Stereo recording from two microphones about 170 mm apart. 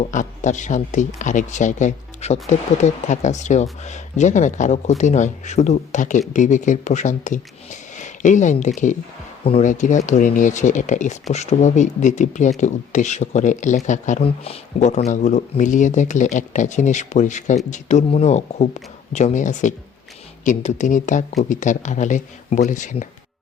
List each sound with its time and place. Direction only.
0.0 s speech: 45° left (ahead or behind)